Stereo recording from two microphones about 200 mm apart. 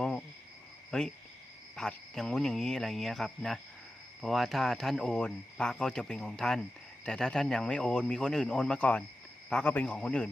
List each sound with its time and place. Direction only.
0.0 s cricket: 5° left (ahead or behind)
0.9 s speech: 5° left (ahead or behind)